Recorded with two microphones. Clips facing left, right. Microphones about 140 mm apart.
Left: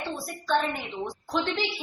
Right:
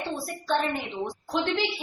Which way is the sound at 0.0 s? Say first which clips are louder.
Right 2 dB; 20° right (ahead or behind).